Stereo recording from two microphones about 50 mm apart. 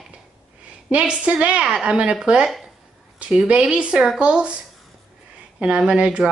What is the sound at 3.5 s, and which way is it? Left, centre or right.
Speech, right.